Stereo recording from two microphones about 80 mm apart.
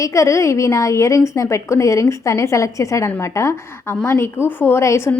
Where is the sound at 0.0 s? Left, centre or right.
Left.